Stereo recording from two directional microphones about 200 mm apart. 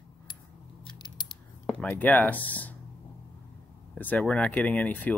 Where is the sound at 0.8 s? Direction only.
20° left (ahead or behind).